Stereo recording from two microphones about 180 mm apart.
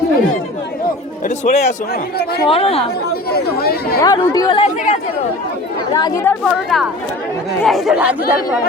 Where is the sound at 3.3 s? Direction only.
60° left (ahead or behind).